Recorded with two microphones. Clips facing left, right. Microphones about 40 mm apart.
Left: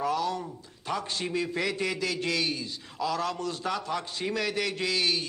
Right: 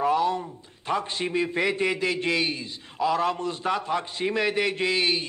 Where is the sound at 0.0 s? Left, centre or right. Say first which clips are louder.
Right 5 dB; right.